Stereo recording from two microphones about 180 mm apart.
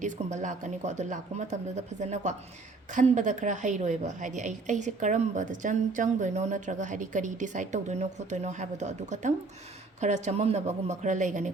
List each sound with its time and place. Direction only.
0.0 s a woman's voice: 45° right (ahead or behind)